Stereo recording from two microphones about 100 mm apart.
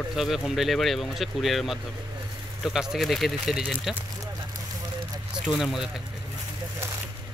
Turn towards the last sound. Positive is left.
turn(degrees=0)  # may be behind; listen again after turning